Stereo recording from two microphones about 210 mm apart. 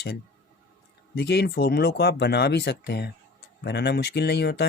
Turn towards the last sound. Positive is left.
turn(degrees=50)  # may be behind; listen again after turning